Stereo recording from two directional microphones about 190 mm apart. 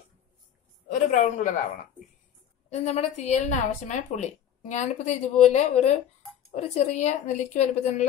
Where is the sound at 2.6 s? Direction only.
35° left (ahead or behind).